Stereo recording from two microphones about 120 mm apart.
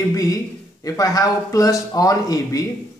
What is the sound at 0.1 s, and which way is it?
A man's voice, 25° left (ahead or behind).